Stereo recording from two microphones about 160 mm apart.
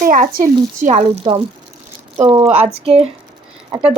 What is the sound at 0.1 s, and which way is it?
Speech, 60° right (ahead or behind).